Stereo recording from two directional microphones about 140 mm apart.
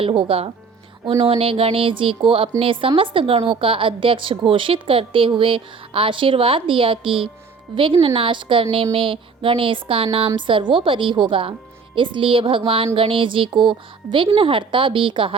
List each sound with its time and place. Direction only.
0.0 s a woman's voice: 40° right (ahead or behind)